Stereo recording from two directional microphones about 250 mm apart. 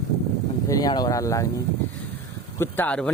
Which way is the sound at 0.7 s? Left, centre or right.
Centre.